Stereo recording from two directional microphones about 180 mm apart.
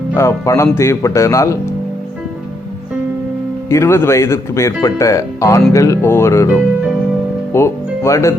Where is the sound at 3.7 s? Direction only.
15° left (ahead or behind).